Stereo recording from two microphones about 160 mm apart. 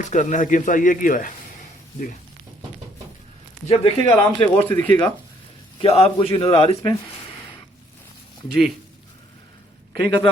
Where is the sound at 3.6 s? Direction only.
35° left (ahead or behind).